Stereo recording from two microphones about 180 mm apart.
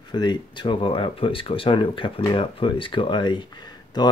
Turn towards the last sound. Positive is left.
turn(degrees=25)  # may be behind; listen again after turning